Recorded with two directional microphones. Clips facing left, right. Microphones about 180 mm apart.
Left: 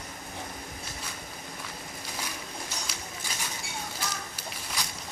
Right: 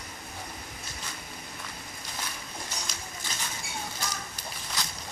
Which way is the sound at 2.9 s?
5° left (ahead or behind).